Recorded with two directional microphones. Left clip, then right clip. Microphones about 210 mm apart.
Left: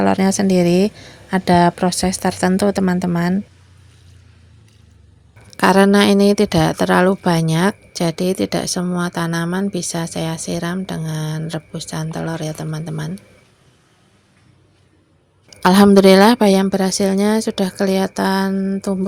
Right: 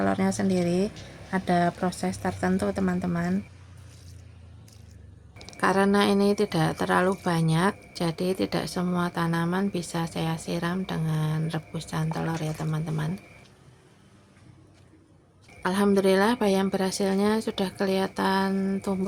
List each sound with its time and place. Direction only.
0.0 s a woman's voice: 45° left (ahead or behind)
5.5 s a woman's voice: 40° left (ahead or behind)
15.6 s a woman's voice: 50° left (ahead or behind); by 18.9 s 25° left (ahead or behind)